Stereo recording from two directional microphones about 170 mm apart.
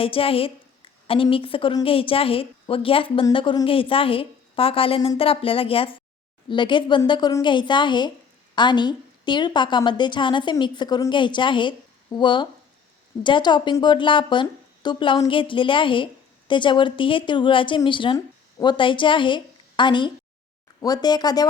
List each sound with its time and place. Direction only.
0.0 s a woman's voice: 35° left (ahead or behind)